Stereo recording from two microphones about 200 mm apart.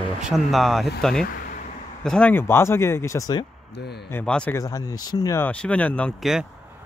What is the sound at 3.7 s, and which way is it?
Speech, 55° left (ahead or behind).